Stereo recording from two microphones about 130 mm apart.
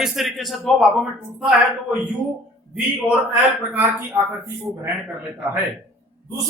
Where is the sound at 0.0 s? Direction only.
Centre (ahead or behind).